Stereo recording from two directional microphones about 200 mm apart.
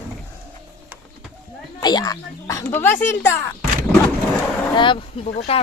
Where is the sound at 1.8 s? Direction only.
20° left (ahead or behind).